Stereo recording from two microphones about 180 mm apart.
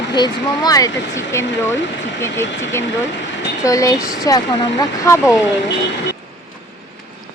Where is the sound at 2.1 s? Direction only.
90° left.